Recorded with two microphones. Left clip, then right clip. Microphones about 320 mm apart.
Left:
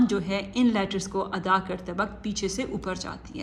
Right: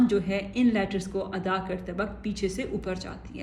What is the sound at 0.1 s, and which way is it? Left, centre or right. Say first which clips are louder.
Speech: right 1 dB; centre.